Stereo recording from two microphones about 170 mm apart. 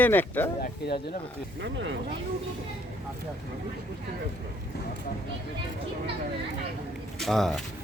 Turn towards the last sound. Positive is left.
turn(degrees=0)  # may be behind; listen again after turning